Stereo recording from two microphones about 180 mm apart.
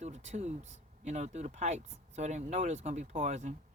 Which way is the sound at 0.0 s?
40° right (ahead or behind).